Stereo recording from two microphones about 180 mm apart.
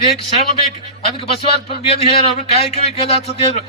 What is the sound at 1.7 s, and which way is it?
A man's voice, 35° left (ahead or behind).